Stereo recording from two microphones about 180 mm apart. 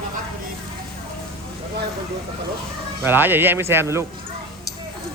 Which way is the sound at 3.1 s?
10° right (ahead or behind).